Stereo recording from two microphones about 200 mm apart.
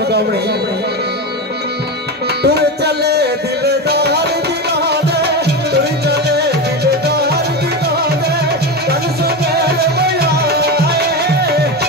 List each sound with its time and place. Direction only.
2.4 s music: 55° right (ahead or behind)
8.8 s music: 55° right (ahead or behind)